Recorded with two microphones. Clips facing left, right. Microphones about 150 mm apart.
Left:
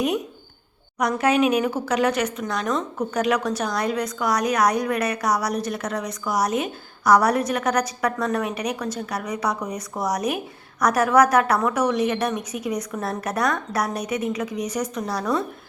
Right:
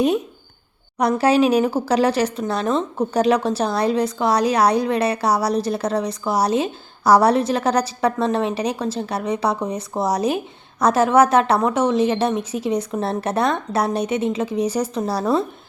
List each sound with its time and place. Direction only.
0.9 s speech: 30° right (ahead or behind)